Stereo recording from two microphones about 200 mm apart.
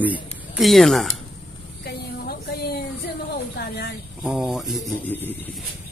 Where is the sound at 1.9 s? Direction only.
55° left (ahead or behind).